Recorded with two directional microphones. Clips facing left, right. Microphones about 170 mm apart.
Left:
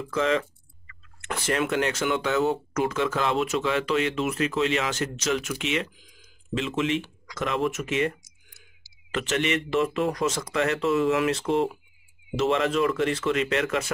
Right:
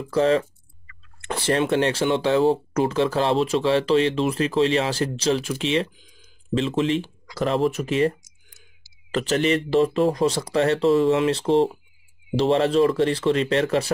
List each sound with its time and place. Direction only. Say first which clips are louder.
0.0 s speech: right 5 dB; 35° right (ahead or behind)